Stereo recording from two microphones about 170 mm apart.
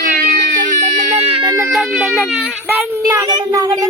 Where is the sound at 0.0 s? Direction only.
55° right (ahead or behind).